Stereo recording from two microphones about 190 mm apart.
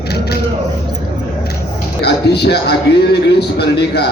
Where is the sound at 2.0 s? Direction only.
60° left (ahead or behind).